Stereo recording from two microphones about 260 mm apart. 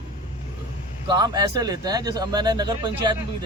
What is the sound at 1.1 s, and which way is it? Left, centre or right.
Speech, centre.